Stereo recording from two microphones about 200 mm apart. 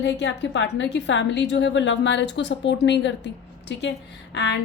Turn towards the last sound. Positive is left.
turn(degrees=60)  # may be behind; listen again after turning